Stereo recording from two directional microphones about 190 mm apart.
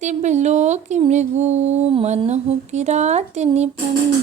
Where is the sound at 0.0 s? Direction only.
40° right (ahead or behind).